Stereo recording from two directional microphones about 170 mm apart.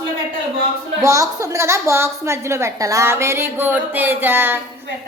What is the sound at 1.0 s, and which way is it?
A woman's voice, 20° right (ahead or behind).